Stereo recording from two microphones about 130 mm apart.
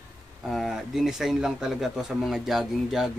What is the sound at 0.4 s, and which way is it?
Speech, centre (ahead or behind).